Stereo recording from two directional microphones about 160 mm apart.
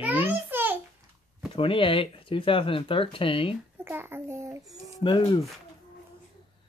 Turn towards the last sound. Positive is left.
turn(degrees=30)  # may be behind; listen again after turning